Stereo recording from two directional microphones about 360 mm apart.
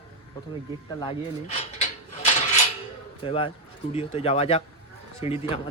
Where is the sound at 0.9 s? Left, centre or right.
Centre.